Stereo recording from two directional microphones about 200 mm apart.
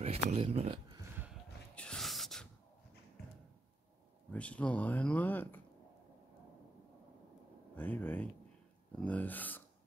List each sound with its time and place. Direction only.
0.0 s speech: 30° right (ahead or behind)
1.8 s a sound: 5° left (ahead or behind)
4.3 s speech: 5° left (ahead or behind)
7.7 s speech: 10° left (ahead or behind)